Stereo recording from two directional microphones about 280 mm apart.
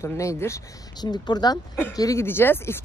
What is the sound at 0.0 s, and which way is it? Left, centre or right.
Speech, centre.